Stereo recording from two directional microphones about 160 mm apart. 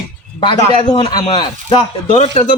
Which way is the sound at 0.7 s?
35° left (ahead or behind).